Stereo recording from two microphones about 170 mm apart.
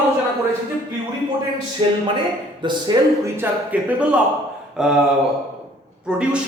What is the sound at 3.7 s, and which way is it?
A man's voice, 10° right (ahead or behind).